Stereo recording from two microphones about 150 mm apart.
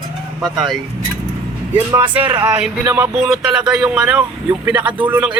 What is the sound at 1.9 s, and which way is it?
Speech, 30° right (ahead or behind).